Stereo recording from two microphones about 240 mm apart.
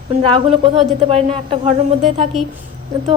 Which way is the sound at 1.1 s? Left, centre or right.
Right.